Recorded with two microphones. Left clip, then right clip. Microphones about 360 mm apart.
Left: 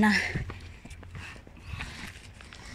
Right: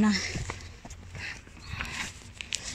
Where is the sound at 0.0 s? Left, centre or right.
Left.